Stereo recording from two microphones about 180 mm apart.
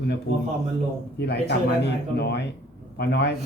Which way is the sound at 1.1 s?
65° left (ahead or behind).